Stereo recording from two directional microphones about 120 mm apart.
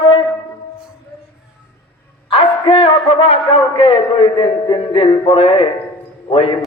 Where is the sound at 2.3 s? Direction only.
50° left (ahead or behind).